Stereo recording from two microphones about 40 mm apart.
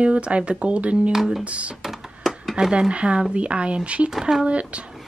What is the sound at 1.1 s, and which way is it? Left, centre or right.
Speech, centre.